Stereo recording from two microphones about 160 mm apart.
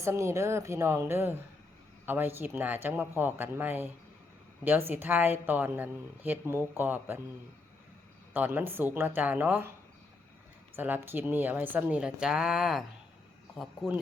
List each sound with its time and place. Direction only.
0.0 s speech: 15° right (ahead or behind)
8.3 s speech: 10° right (ahead or behind)
10.8 s speech: 10° right (ahead or behind)